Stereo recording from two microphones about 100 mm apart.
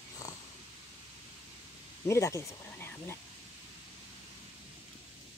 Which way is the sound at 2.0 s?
30° left (ahead or behind).